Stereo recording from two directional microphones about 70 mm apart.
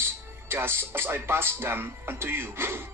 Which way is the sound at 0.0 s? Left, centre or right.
Right.